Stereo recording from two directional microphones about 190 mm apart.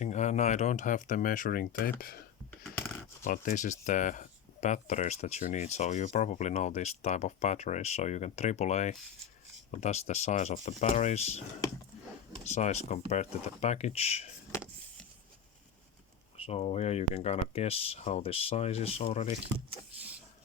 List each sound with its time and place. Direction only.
0.0 s speech: 35° left (ahead or behind)
3.2 s speech: 45° left (ahead or behind)
12.5 s speech: 35° left (ahead or behind)
16.5 s speech: 35° left (ahead or behind)